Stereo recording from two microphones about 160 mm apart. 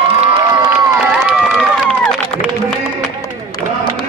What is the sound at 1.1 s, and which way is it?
Run, 5° right (ahead or behind).